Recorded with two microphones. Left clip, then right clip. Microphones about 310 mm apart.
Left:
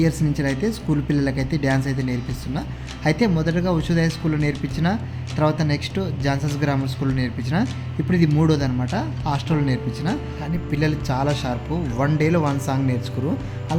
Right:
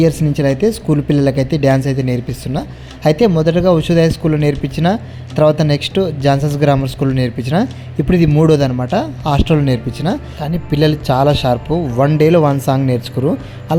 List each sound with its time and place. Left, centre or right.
0.0 s speech: right